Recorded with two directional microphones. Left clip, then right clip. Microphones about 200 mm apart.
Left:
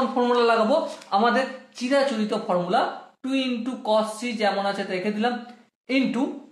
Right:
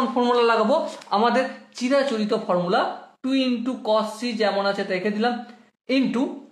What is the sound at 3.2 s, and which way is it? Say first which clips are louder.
A man's voice: right 3 dB; 35° right (ahead or behind).